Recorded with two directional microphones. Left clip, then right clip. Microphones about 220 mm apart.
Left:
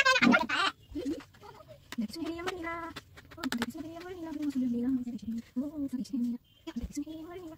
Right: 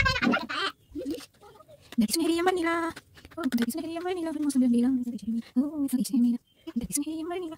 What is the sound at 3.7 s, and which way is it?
Speech, 45° right (ahead or behind).